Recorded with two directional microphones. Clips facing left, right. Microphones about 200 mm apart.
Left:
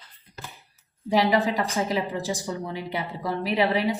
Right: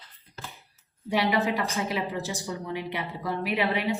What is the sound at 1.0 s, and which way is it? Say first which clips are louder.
A woman's voice: left 3 dB; 35° left (ahead or behind).